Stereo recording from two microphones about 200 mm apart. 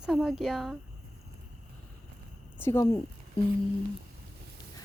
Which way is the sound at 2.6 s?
15° left (ahead or behind).